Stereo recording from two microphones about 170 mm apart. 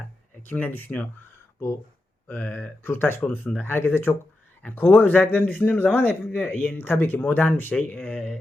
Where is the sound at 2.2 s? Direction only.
10° left (ahead or behind).